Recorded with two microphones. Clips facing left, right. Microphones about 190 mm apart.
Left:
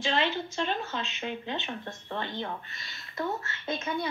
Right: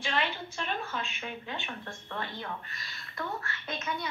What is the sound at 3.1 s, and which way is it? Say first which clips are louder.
Speech: left 4 dB; 25° left (ahead or behind).